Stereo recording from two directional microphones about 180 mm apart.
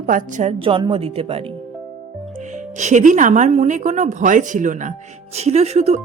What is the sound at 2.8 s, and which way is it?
Speech, 40° right (ahead or behind).